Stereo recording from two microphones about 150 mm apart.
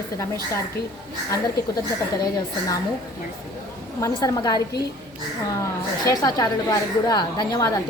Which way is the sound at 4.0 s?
25° left (ahead or behind).